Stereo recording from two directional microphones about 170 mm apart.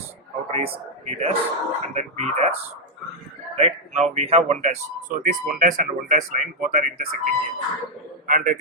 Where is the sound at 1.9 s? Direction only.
40° right (ahead or behind).